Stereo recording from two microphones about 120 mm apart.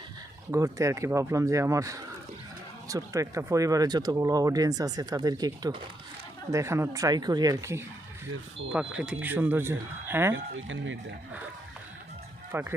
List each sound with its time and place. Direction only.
0.5 s speech: 25° right (ahead or behind)
8.7 s speech: 5° right (ahead or behind)
12.5 s speech: 15° right (ahead or behind)